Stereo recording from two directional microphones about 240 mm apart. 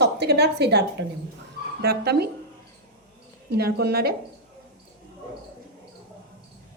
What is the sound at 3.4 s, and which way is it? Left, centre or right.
Speech, right.